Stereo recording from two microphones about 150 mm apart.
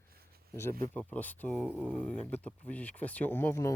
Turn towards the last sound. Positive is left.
turn(degrees=15)  # may be behind; listen again after turning